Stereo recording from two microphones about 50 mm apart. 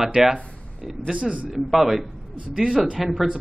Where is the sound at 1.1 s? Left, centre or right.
Right.